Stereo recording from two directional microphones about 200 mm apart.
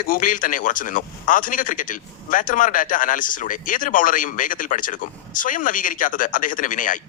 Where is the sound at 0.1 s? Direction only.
45° left (ahead or behind).